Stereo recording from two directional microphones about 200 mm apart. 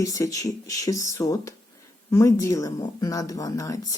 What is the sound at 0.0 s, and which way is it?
Speech, 15° left (ahead or behind).